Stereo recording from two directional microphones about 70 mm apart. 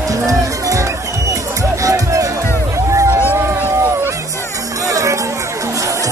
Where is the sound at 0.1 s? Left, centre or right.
Right.